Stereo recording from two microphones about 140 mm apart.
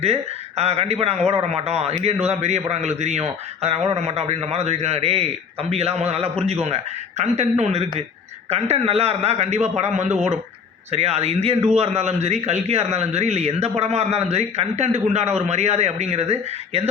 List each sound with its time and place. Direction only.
0.0 s a man's voice: 50° right (ahead or behind)